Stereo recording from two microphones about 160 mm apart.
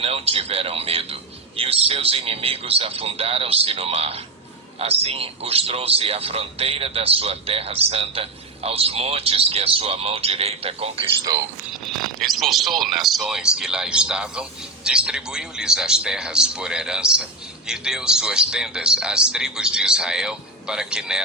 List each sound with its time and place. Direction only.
0.0 s speech: 35° right (ahead or behind)
11.9 s a man's voice: centre (ahead or behind)